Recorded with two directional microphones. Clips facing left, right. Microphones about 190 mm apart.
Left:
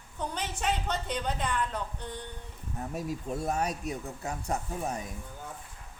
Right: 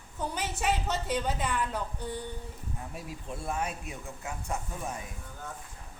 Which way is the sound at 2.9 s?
40° left (ahead or behind).